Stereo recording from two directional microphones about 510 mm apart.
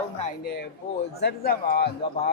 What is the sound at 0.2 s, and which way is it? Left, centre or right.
A man's voice, centre.